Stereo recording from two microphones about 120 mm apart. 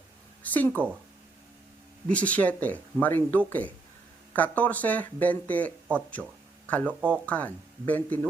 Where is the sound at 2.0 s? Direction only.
10° left (ahead or behind).